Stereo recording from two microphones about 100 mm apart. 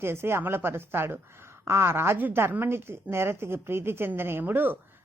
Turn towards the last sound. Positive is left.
turn(degrees=-20)  # may be behind; listen again after turning